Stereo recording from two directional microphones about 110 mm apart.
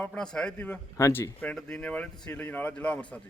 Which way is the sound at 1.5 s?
10° left (ahead or behind).